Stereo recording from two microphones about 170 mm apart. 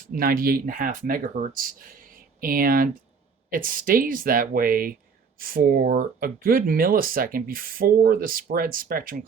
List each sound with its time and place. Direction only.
0.0 s speech: 55° right (ahead or behind)